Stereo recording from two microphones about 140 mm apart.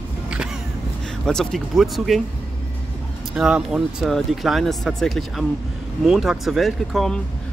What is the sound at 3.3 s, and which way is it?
Speech, 5° right (ahead or behind).